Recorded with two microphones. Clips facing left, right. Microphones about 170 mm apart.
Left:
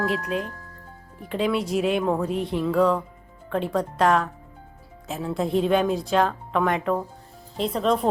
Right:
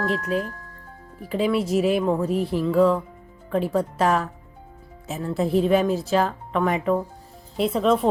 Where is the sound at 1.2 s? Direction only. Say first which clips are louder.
Right 2 dB; 5° right (ahead or behind).